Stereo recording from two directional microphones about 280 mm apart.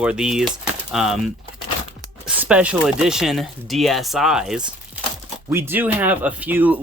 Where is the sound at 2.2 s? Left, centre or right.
Centre.